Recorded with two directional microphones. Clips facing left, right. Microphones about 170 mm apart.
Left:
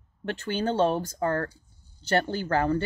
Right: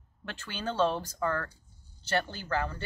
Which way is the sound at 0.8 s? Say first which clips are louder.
Left 4 dB; 35° left (ahead or behind).